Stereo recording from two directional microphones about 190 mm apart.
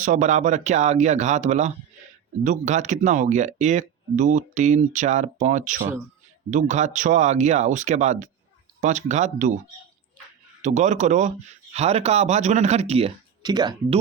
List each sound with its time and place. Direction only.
0.0 s speech: 40° right (ahead or behind)
10.6 s speech: 40° right (ahead or behind); by 14.0 s 20° right (ahead or behind)